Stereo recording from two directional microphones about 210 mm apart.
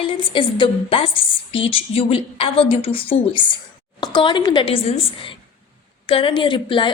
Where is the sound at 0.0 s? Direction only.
25° left (ahead or behind).